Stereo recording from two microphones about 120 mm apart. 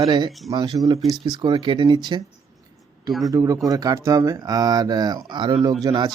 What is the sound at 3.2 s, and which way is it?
A man's voice, 30° right (ahead or behind).